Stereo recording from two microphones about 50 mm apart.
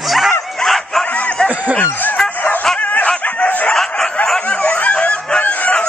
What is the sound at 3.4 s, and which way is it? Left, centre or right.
Chicken, left.